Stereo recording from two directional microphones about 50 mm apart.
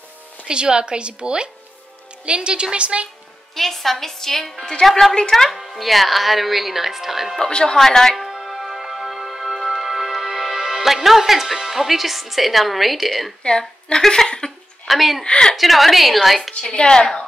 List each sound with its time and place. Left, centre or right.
0.5 s a woman's voice: centre
3.5 s speech: centre
7.3 s a woman's voice: centre
8.2 s music: centre
13.4 s a woman's voice: centre
14.9 s speech: centre
15.2 s a woman's voice: centre
15.5 s speech: centre
16.6 s a woman's voice: centre